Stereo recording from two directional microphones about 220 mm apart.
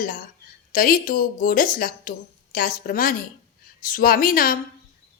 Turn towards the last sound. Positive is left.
turn(degrees=40)  # may be behind; listen again after turning